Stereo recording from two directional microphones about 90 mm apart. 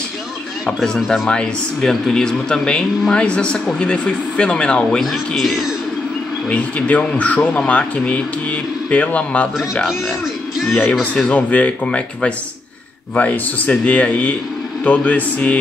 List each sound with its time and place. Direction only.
0.7 s a man's voice: 5° left (ahead or behind)
5.0 s speech: centre (ahead or behind)
6.5 s a man's voice: 15° left (ahead or behind)
10.7 s a man's voice: 20° left (ahead or behind)